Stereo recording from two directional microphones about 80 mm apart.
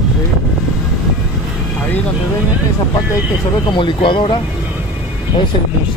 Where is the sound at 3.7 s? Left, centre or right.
Left.